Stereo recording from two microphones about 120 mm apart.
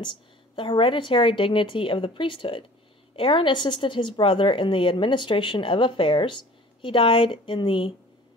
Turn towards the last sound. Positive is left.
turn(degrees=45)  # may be behind; listen again after turning